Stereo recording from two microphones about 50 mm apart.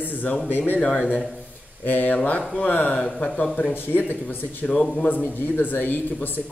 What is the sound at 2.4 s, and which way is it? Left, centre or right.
Speech, left.